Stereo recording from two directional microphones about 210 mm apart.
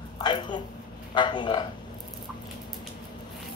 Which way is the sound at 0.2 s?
20° left (ahead or behind).